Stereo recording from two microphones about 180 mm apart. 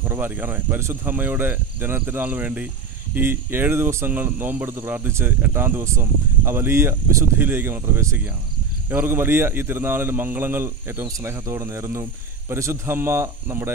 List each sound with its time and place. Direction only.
0.1 s speech: 10° right (ahead or behind)